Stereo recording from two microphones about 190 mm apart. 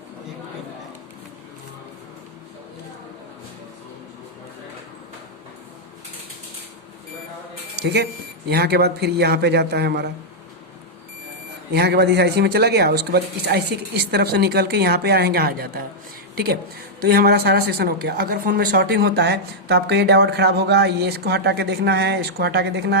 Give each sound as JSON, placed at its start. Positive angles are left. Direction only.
{"t": 7.8, "sound": "a woman's voice", "side_deg": -65}
{"t": 11.7, "sound": "a woman's voice", "side_deg": -60}